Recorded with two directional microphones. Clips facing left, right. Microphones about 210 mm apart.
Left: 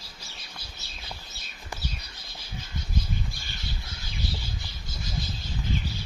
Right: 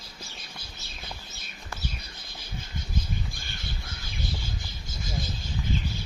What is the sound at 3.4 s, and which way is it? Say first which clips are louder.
Crow: even; 50° right (ahead or behind).